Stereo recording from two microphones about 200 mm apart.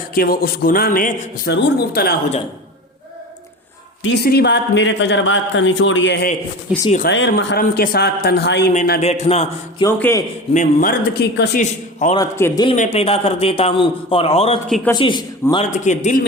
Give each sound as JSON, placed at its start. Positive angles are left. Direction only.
{"t": 0.1, "sound": "a man's voice", "side_deg": 45}
{"t": 4.0, "sound": "a man's voice", "side_deg": 55}
{"t": 6.7, "sound": "speech", "side_deg": -5}
{"t": 7.1, "sound": "a man's voice", "side_deg": 60}
{"t": 8.7, "sound": "a man's voice", "side_deg": 40}
{"t": 9.8, "sound": "a man's voice", "side_deg": 15}
{"t": 10.5, "sound": "a man's voice", "side_deg": 40}
{"t": 11.6, "sound": "a man's voice", "side_deg": 35}
{"t": 12.1, "sound": "a man's voice", "side_deg": 15}
{"t": 12.7, "sound": "a man's voice", "side_deg": 35}
{"t": 15.6, "sound": "a man's voice", "side_deg": 35}